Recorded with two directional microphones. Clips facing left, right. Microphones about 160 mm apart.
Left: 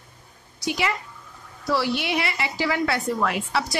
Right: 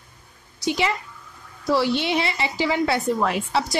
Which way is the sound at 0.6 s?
25° right (ahead or behind).